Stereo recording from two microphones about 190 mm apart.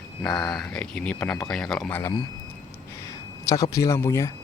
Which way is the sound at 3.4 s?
20° left (ahead or behind).